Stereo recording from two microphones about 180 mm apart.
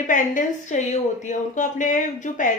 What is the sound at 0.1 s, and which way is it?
A woman's voice, 45° left (ahead or behind).